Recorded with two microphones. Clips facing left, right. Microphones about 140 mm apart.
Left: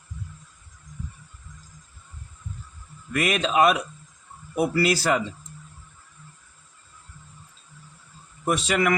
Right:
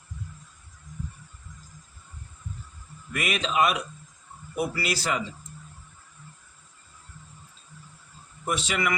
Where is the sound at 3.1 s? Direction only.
45° left (ahead or behind).